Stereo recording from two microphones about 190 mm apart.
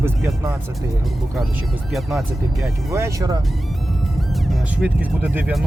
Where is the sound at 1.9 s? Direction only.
Centre (ahead or behind).